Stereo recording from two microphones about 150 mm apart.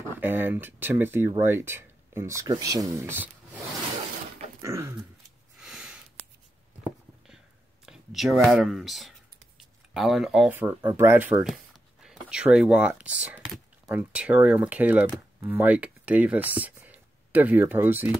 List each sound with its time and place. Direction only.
0.2 s speech: 10° right (ahead or behind)
4.6 s dog: 20° right (ahead or behind)
5.6 s a sound: 5° right (ahead or behind)
7.8 s speech: 5° right (ahead or behind)
9.6 s a sound: 5° right (ahead or behind)
10.5 s speech: 15° right (ahead or behind)
11.4 s speech: centre (ahead or behind)